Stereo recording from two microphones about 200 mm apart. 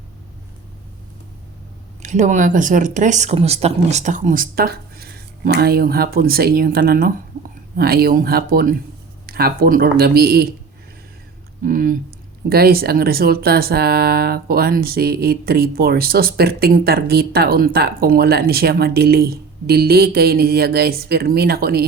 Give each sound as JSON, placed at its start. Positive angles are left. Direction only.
{"t": 2.0, "sound": "speech", "side_deg": -35}
{"t": 11.6, "sound": "speech", "side_deg": -40}